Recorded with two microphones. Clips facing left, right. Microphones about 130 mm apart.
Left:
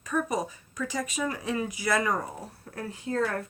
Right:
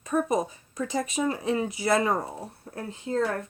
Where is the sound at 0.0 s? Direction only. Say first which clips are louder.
Right 3 dB; 30° right (ahead or behind).